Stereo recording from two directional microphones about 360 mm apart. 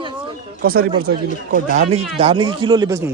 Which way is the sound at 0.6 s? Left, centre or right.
Right.